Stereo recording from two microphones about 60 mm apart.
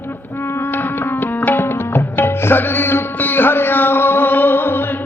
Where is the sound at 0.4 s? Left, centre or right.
Left.